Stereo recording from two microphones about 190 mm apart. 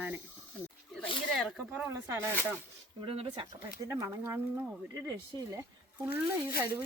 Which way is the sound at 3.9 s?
15° right (ahead or behind).